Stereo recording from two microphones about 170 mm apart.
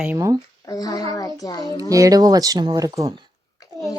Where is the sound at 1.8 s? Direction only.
20° right (ahead or behind).